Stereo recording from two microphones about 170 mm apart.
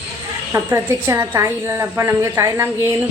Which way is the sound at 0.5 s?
15° right (ahead or behind).